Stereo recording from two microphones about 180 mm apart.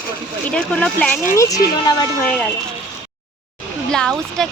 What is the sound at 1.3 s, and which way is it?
Speech, 20° left (ahead or behind).